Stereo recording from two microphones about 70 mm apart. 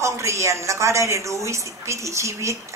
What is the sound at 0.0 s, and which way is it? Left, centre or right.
A woman's voice, right.